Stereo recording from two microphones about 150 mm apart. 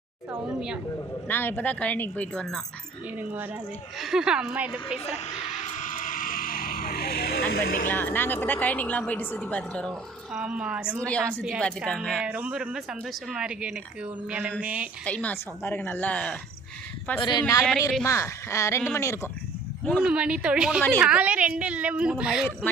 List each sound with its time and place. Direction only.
0.3 s a woman's voice: 5° right (ahead or behind)
1.3 s speech: 15° left (ahead or behind)
3.2 s a woman's voice: 10° right (ahead or behind)
5.0 s a sound: 45° left (ahead or behind); by 7.4 s 90° left
7.5 s speech: 85° left
7.9 s speech: 10° left (ahead or behind)
10.3 s a woman's voice: 5° right (ahead or behind)
11.0 s a woman's voice: 10° left (ahead or behind)
12.2 s a woman's voice: 10° right (ahead or behind)
15.0 s speech: 10° left (ahead or behind)
17.2 s speech: 30° left (ahead or behind)
20.0 s a woman's voice: 5° right (ahead or behind)